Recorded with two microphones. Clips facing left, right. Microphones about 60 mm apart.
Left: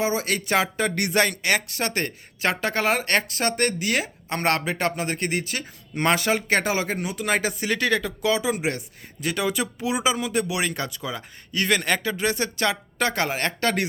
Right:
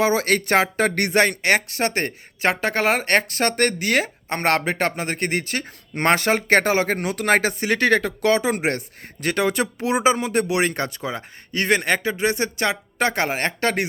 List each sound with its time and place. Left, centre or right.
0.0 s speech: right
7.6 s speech: right